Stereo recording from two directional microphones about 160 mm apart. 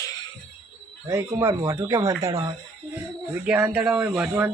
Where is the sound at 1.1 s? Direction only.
20° right (ahead or behind).